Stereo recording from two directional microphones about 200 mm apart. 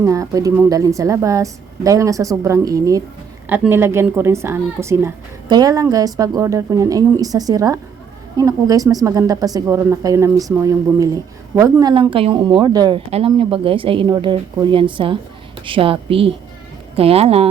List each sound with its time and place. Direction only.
0.0 s a woman's voice: 15° right (ahead or behind)